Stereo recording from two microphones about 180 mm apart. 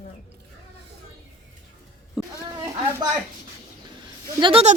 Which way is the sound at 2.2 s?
5° right (ahead or behind).